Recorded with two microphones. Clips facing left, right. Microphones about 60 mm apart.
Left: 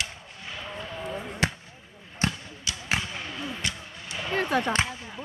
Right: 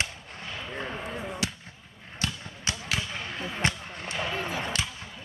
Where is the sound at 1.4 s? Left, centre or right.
Left.